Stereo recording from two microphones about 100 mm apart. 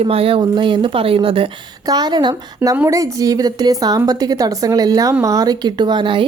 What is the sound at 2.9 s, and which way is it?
A woman's voice, 35° right (ahead or behind).